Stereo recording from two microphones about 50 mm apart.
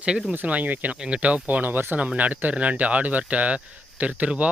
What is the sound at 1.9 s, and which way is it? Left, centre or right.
Speech, right.